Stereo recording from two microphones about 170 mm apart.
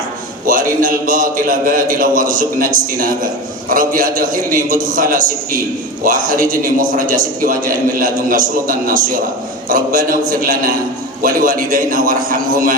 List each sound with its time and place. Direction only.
0.4 s a man's voice: 55° right (ahead or behind)